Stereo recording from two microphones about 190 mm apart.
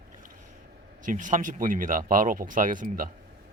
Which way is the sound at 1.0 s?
45° right (ahead or behind).